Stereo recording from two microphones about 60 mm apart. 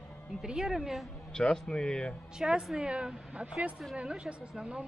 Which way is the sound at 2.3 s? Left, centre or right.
Centre.